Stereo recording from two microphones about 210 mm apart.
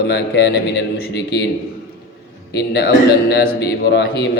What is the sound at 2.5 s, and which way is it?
A man's voice, 50° left (ahead or behind).